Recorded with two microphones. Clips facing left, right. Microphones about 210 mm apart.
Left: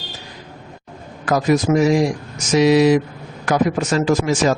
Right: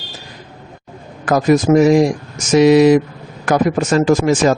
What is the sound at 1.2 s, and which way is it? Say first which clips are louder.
A man's voice: right 4 dB; 50° right (ahead or behind).